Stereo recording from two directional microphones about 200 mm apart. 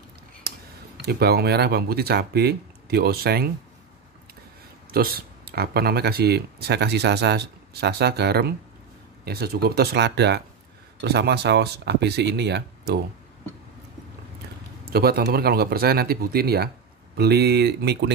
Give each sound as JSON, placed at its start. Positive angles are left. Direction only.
{"t": 0.5, "sound": "a sound", "side_deg": -50}
{"t": 1.0, "sound": "speech", "side_deg": -55}
{"t": 4.9, "sound": "speech", "side_deg": -50}
{"t": 14.9, "sound": "speech", "side_deg": -50}